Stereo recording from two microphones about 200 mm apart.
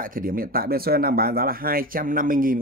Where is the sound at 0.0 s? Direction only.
45° right (ahead or behind).